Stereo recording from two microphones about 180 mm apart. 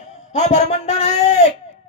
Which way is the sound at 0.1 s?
40° left (ahead or behind).